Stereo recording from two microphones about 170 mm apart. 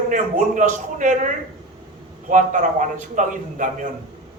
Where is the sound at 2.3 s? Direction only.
50° right (ahead or behind).